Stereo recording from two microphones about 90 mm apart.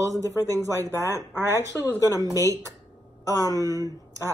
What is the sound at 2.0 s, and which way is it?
Speech, 40° left (ahead or behind).